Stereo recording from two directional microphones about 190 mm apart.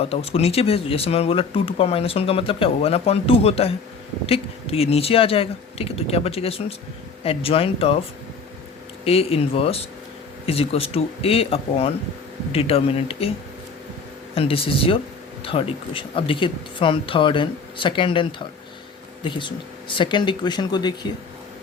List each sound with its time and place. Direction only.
0.0 s speech: 30° left (ahead or behind)
9.0 s speech: 30° left (ahead or behind)
14.3 s speech: 30° left (ahead or behind)